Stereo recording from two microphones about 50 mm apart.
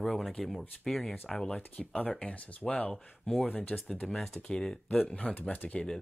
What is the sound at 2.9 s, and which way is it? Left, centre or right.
Speech, centre.